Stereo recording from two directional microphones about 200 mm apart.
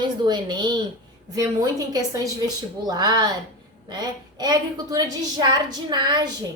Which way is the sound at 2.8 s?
20° right (ahead or behind).